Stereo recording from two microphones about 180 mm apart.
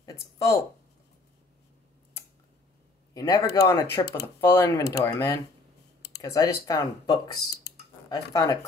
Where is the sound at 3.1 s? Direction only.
20° left (ahead or behind).